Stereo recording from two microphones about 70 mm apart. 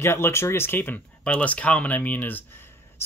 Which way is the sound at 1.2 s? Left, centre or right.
Centre.